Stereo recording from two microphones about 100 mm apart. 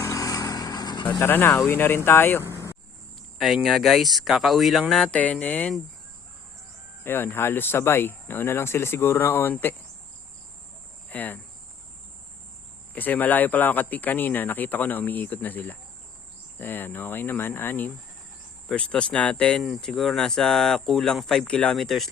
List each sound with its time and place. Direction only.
0.0 s vehicle: 35° left (ahead or behind)
1.2 s speech: 20° left (ahead or behind)
2.4 s vehicle: 25° right (ahead or behind)
3.3 s speech: centre (ahead or behind)
7.0 s speech: 20° left (ahead or behind)
11.1 s cricket: 15° left (ahead or behind)
12.9 s speech: 15° left (ahead or behind)